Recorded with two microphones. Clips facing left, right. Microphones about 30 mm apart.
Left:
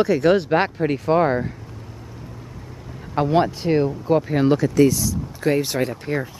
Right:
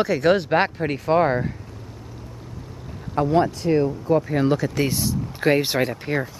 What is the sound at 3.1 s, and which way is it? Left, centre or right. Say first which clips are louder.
Speech: left 1 dB; left.